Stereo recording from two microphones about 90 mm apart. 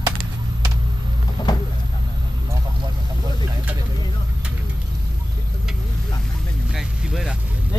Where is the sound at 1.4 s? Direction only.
50° left (ahead or behind).